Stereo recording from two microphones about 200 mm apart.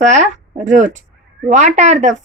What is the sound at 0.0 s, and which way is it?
Speech, 35° right (ahead or behind).